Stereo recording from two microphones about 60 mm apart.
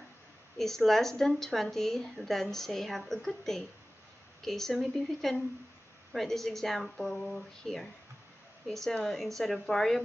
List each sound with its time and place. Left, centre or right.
0.6 s a woman's voice: centre